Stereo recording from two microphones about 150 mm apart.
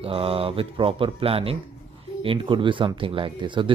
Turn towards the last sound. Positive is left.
turn(degrees=-30)  # may be behind; listen again after turning